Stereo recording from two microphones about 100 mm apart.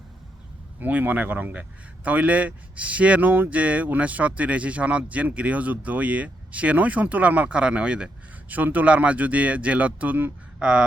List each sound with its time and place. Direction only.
0.8 s speech: 15° right (ahead or behind)